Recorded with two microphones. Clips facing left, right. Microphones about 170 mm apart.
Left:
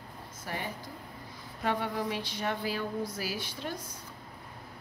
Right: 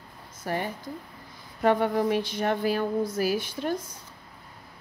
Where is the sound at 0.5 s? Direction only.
45° right (ahead or behind).